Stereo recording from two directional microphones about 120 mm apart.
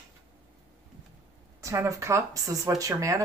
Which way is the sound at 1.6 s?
25° right (ahead or behind).